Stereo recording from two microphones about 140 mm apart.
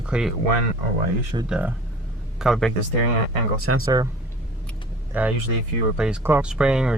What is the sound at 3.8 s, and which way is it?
Speech, 25° right (ahead or behind).